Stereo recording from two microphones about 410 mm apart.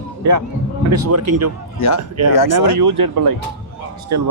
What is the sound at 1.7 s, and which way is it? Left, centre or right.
Speech, left.